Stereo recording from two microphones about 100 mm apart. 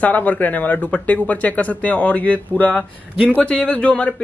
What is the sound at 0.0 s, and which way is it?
A man's voice, 15° left (ahead or behind).